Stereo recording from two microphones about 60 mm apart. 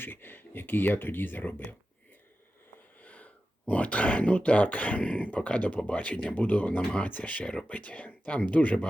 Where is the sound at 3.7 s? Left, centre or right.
Left.